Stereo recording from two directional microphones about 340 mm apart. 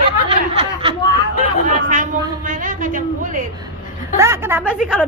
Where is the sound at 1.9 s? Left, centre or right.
Right.